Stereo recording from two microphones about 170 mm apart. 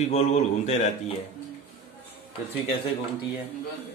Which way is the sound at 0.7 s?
40° left (ahead or behind).